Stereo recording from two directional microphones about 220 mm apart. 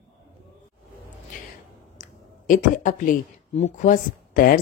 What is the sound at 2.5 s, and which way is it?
Speech, 35° left (ahead or behind).